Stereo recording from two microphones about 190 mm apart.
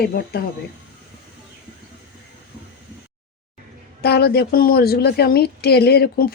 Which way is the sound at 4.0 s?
55° left (ahead or behind).